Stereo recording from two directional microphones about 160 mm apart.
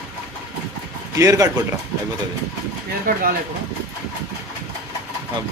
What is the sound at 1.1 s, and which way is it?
Speech, 20° right (ahead or behind).